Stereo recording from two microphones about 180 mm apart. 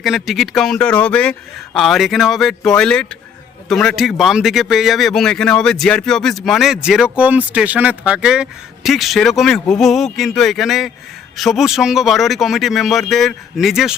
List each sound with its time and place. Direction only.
0.0 s speech: centre (ahead or behind)